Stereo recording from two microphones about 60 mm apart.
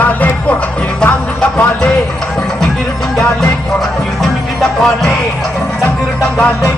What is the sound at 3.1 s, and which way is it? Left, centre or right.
Music, centre.